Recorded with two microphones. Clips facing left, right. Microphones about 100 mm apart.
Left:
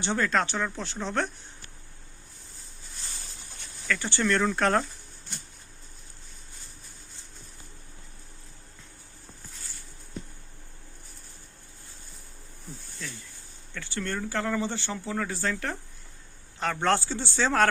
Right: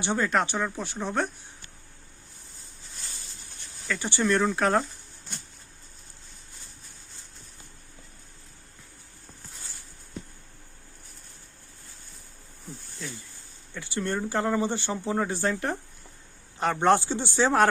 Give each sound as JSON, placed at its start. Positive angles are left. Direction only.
{"t": 0.0, "sound": "speech", "side_deg": -15}
{"t": 3.8, "sound": "speech", "side_deg": -15}
{"t": 13.7, "sound": "speech", "side_deg": -15}